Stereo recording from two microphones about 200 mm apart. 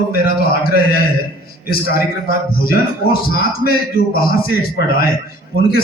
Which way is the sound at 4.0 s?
50° left (ahead or behind).